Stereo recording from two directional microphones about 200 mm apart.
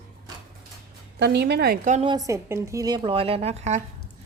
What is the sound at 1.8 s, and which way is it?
Speech, 35° right (ahead or behind).